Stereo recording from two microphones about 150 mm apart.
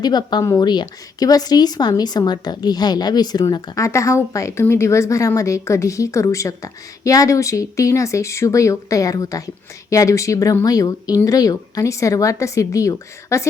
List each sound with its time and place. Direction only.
0.0 s a woman's voice: 30° left (ahead or behind)